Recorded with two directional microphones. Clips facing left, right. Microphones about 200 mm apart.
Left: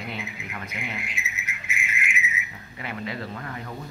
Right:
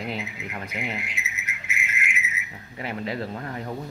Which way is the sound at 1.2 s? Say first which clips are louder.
Even; 70° right (ahead or behind).